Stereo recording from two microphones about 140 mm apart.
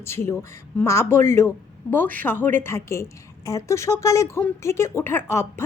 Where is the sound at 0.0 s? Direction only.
20° left (ahead or behind).